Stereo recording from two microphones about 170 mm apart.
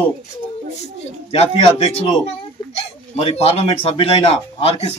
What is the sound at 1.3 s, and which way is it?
Speech, 40° left (ahead or behind).